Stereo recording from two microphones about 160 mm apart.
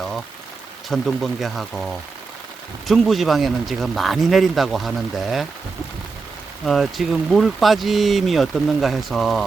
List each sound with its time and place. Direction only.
0.9 s speech: centre (ahead or behind)
6.7 s speech: centre (ahead or behind)